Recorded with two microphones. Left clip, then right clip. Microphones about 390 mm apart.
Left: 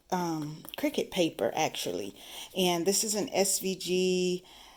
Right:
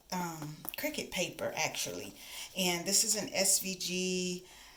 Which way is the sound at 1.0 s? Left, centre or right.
Centre.